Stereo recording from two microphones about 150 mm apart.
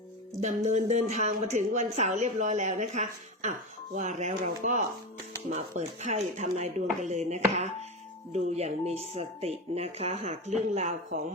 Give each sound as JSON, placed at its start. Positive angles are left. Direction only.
{"t": 0.4, "sound": "a woman's voice", "side_deg": -50}